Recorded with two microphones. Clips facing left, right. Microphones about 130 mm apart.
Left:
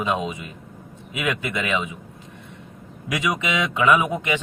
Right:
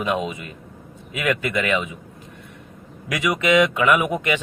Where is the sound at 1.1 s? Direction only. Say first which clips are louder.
Right 3 dB; 20° left (ahead or behind).